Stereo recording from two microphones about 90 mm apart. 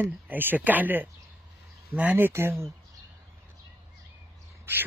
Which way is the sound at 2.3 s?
30° right (ahead or behind).